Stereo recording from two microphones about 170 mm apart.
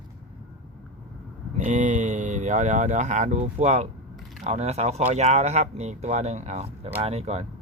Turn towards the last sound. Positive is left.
turn(degrees=-40)  # may be behind; listen again after turning